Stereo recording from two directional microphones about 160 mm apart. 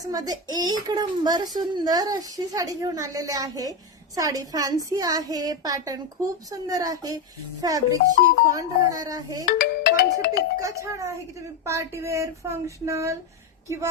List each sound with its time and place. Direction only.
0.0 s a woman's voice: 25° right (ahead or behind)
9.5 s music: 80° left
10.6 s a woman's voice: 20° right (ahead or behind)
11.9 s a sound: 20° right (ahead or behind)